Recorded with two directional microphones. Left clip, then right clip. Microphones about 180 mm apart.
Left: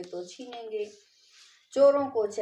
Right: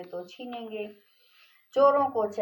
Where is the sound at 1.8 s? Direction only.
40° left (ahead or behind).